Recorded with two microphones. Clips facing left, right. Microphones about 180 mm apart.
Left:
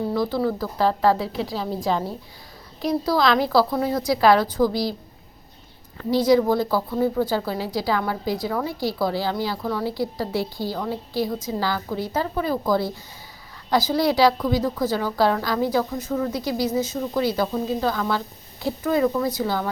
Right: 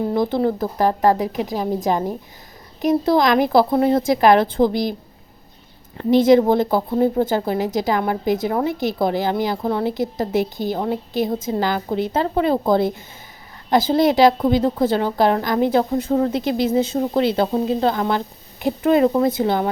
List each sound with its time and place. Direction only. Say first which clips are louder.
0.1 s a woman's voice: right 4 dB; 20° right (ahead or behind)
6.0 s a woman's voice: right 5 dB; 25° right (ahead or behind)
7.3 s a woman's voice: right 5 dB; 20° right (ahead or behind)
16.4 s a woman's voice: right 5 dB; 25° right (ahead or behind)